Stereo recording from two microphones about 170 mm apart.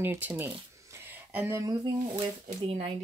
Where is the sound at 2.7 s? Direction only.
35° right (ahead or behind).